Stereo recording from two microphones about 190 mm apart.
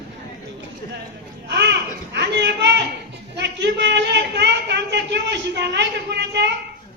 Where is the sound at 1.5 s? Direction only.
65° right (ahead or behind).